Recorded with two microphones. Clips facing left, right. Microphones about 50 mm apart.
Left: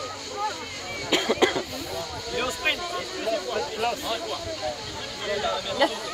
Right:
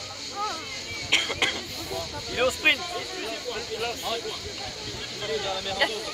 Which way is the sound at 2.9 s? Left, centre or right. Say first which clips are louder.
Left 5 dB; centre.